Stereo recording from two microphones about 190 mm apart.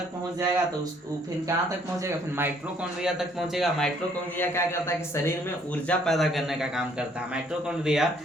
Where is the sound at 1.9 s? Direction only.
15° right (ahead or behind).